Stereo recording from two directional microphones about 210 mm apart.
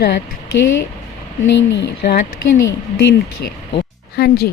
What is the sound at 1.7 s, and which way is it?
Speech, 55° left (ahead or behind).